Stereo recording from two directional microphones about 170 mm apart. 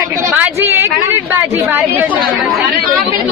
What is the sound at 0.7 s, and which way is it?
A woman's voice, 15° right (ahead or behind).